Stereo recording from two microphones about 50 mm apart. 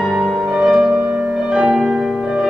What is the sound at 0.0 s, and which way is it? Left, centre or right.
Music, centre.